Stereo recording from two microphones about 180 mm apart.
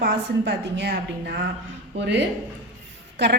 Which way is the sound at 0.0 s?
70° right (ahead or behind).